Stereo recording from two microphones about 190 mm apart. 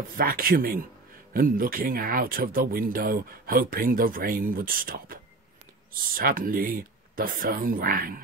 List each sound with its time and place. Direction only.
0.2 s speech: 50° right (ahead or behind)